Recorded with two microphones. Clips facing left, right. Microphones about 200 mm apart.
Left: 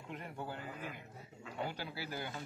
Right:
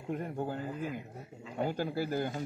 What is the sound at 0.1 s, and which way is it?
Speech, 45° right (ahead or behind).